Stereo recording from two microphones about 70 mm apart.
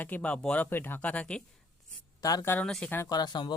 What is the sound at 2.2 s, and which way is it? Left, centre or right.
Speech, left.